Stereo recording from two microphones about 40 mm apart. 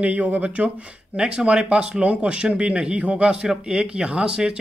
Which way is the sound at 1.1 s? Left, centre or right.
Right.